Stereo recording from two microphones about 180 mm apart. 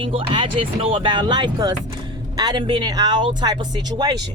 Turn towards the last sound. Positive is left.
turn(degrees=-20)  # may be behind; listen again after turning